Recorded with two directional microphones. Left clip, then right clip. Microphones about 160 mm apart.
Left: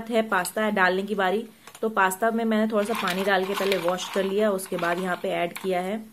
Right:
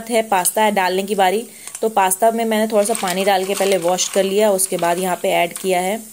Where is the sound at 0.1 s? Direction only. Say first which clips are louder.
Right 7 dB; 20° right (ahead or behind).